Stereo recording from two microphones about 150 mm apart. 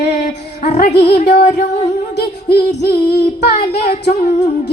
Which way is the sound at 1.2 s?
90° left.